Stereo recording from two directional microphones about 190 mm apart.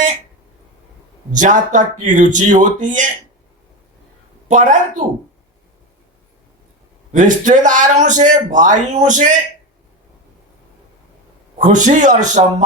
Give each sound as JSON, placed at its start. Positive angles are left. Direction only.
{"t": 1.3, "sound": "a man's voice", "side_deg": -40}
{"t": 4.4, "sound": "a man's voice", "side_deg": -40}
{"t": 7.1, "sound": "a man's voice", "side_deg": -40}
{"t": 11.5, "sound": "a man's voice", "side_deg": -40}